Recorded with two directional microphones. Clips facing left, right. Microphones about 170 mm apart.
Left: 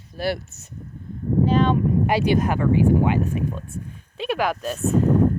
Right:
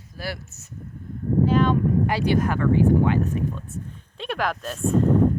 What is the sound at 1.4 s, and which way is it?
Speech, 20° left (ahead or behind).